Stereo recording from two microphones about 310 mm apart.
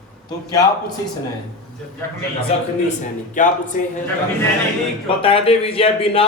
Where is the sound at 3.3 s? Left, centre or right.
Left.